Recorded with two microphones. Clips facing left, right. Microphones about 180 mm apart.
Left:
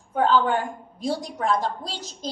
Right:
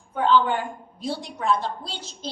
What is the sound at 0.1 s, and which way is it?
A woman's voice, 40° left (ahead or behind).